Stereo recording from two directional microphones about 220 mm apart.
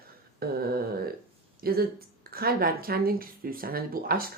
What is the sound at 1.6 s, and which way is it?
Speech, 45° right (ahead or behind).